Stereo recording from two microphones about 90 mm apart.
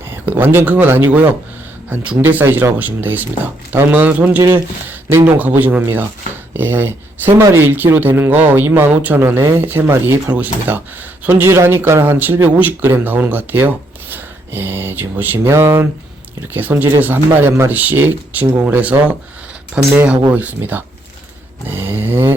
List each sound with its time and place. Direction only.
0.1 s speech: 20° right (ahead or behind)